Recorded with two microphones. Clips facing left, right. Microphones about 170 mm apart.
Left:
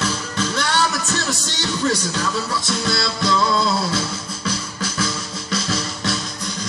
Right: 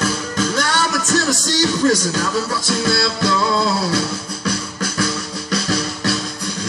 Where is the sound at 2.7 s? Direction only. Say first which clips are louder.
Right 5 dB; 55° right (ahead or behind).